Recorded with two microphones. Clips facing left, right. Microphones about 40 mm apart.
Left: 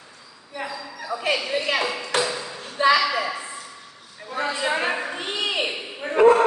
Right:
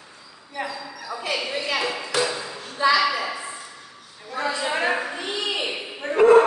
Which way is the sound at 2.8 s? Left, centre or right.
Left.